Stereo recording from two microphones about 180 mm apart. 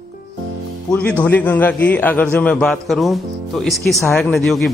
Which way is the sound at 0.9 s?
5° left (ahead or behind).